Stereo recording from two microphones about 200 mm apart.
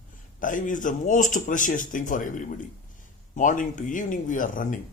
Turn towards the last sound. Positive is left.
turn(degrees=40)  # may be behind; listen again after turning